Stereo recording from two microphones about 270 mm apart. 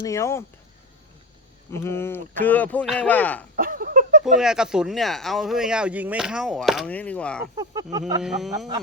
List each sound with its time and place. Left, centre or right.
0.0 s speech: centre
1.7 s speech: centre
3.6 s a sound: right
4.4 s speech: centre
7.5 s speech: centre
8.2 s speech: centre